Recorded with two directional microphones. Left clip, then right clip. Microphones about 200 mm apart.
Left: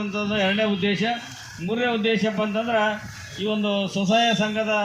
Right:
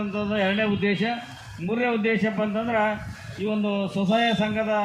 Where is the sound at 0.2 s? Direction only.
35° left (ahead or behind).